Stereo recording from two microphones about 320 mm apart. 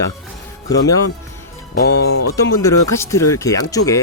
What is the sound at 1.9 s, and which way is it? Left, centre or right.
Music, left.